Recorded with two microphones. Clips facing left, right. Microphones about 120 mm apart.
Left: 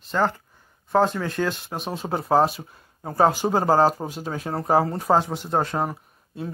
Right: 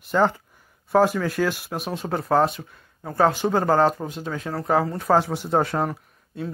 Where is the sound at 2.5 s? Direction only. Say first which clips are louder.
Even; 30° left (ahead or behind).